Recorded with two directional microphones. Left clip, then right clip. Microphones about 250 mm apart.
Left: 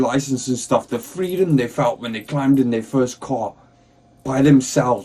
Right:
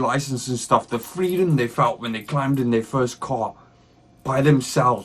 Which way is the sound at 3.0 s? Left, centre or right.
Right.